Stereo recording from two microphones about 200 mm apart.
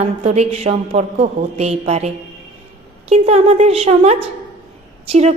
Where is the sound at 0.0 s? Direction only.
30° right (ahead or behind).